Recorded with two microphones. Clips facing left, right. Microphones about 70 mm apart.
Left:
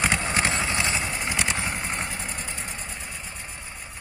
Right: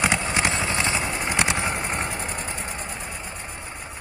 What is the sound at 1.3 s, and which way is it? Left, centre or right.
Vehicle, right.